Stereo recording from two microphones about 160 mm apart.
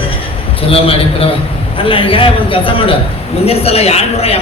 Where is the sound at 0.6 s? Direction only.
35° left (ahead or behind).